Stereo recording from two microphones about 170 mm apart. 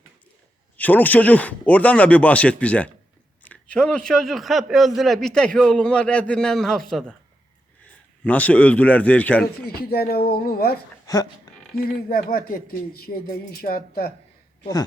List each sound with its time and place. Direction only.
0.8 s a man's voice: 10° left (ahead or behind)
8.2 s speech: 10° left (ahead or behind)
9.6 s speech: 65° left (ahead or behind)
11.0 s a sound: 20° left (ahead or behind)
11.7 s speech: 65° left (ahead or behind)